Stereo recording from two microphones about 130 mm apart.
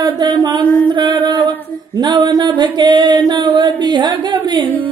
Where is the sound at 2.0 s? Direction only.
35° right (ahead or behind).